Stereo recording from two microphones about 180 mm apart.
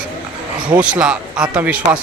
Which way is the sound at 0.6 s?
25° right (ahead or behind).